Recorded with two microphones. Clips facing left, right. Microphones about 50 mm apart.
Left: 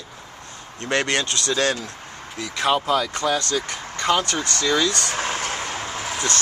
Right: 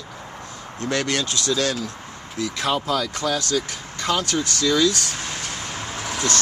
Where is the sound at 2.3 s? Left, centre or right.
Centre.